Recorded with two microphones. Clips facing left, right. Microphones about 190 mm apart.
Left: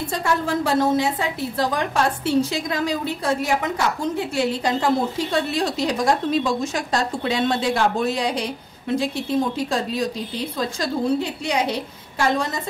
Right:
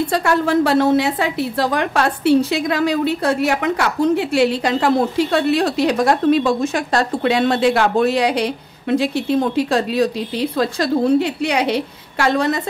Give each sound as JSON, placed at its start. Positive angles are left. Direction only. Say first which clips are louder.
{"t": 0.1, "sound": "a woman's voice", "louder": "right 4 dB", "side_deg": -70}